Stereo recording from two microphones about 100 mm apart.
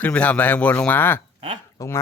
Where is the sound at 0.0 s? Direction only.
15° left (ahead or behind).